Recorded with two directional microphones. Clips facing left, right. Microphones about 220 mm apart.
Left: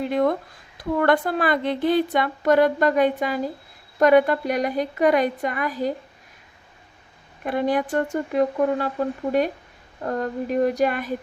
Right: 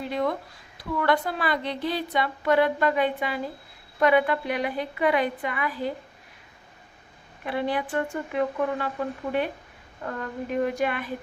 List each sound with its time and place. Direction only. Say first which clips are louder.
0.1 s a woman's voice: left 4 dB; 50° left (ahead or behind)
7.4 s speech: left 5 dB; 45° left (ahead or behind)